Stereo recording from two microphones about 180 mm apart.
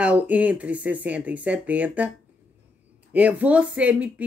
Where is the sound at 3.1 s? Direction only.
10° right (ahead or behind).